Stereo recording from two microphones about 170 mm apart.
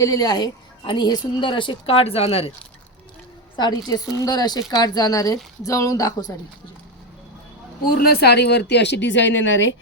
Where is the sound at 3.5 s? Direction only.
25° left (ahead or behind).